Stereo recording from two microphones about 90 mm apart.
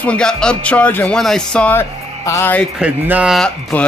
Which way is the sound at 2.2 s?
35° left (ahead or behind).